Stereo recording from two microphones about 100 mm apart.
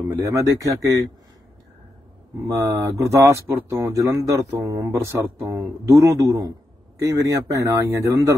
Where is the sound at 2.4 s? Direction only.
35° right (ahead or behind).